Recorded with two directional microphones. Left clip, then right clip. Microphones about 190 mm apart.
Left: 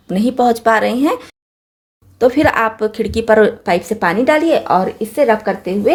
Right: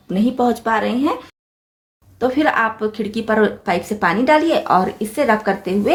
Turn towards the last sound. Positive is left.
turn(degrees=15)  # may be behind; listen again after turning